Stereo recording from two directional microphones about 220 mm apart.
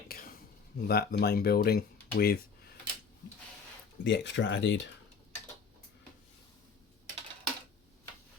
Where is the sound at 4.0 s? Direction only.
55° left (ahead or behind).